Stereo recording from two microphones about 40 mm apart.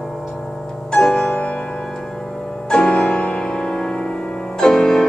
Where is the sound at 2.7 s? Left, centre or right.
Centre.